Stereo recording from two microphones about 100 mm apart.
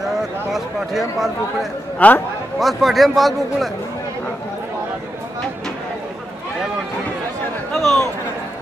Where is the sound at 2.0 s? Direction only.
15° left (ahead or behind).